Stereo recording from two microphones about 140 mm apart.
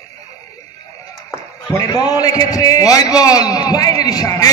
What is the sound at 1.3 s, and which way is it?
A man's voice, 20° left (ahead or behind).